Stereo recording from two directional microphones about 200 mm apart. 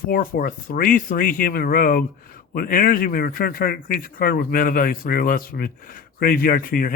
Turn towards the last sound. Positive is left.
turn(degrees=45)  # may be behind; listen again after turning